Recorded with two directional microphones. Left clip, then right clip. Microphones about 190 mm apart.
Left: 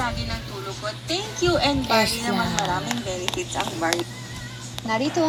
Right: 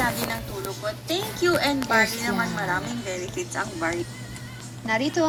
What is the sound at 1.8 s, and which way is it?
A woman's voice, centre (ahead or behind).